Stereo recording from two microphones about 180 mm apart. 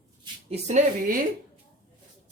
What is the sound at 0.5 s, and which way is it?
Speech, 45° right (ahead or behind).